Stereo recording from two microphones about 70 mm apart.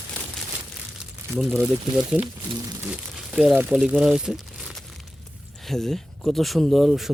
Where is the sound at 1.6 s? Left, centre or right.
Centre.